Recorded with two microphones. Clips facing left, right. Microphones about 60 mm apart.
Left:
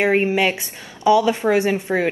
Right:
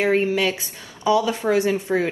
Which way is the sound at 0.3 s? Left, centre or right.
Left.